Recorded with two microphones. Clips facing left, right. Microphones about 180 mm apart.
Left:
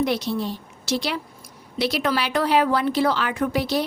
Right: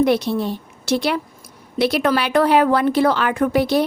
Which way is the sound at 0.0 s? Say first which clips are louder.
Right 6 dB; 55° right (ahead or behind).